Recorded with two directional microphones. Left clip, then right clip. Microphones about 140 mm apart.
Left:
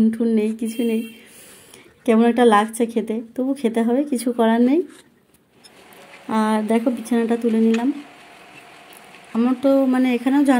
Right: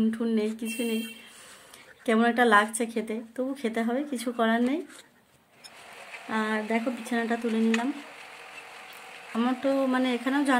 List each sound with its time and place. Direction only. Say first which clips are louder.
0.1 s a woman's voice: left 8 dB; 20° left (ahead or behind)
2.0 s a woman's voice: left 7 dB; 20° left (ahead or behind)
6.2 s a woman's voice: left 8 dB; 30° left (ahead or behind)
9.3 s a woman's voice: left 9 dB; 10° left (ahead or behind)